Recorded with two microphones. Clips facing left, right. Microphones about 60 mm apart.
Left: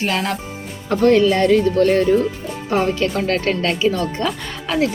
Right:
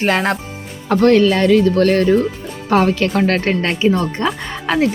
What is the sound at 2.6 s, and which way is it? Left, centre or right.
Speech, right.